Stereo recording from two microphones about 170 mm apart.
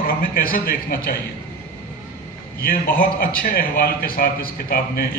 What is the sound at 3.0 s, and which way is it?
A man's voice, 60° left (ahead or behind).